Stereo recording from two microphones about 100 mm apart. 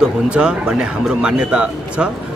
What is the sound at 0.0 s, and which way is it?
Speech, 10° right (ahead or behind).